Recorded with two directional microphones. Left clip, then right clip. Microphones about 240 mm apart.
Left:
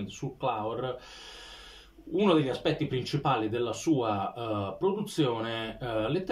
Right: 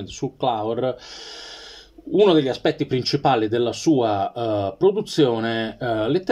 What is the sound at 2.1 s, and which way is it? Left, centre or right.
Speech, right.